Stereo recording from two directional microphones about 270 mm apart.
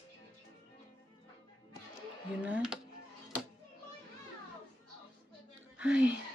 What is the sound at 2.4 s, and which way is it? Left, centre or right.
Speech, centre.